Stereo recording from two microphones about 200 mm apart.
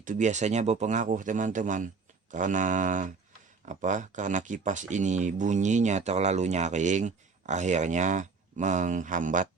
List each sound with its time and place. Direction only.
0.0 s speech: 40° right (ahead or behind)